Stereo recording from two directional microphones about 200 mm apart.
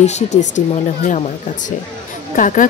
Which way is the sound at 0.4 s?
40° left (ahead or behind).